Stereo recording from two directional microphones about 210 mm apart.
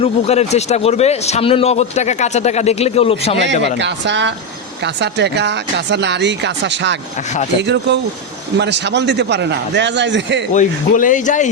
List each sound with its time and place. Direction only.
0.0 s a man's voice: 30° left (ahead or behind)
3.8 s speech: 55° right (ahead or behind)
10.5 s a man's voice: 40° left (ahead or behind)